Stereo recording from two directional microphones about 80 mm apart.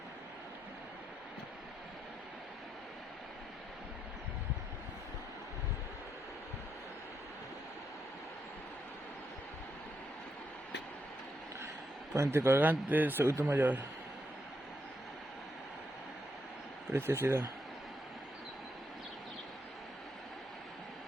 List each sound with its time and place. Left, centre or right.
12.1 s a man's voice: right
12.6 s speech: right
16.9 s a man's voice: right